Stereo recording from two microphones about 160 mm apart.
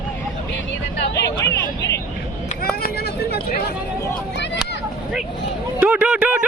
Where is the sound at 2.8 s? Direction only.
75° left (ahead or behind).